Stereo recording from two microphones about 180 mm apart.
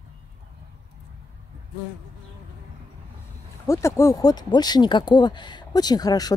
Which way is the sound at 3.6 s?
15° left (ahead or behind).